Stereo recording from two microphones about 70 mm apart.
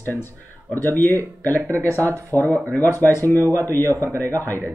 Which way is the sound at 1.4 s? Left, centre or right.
Left.